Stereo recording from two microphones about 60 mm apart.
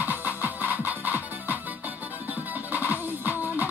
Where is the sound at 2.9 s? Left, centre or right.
Right.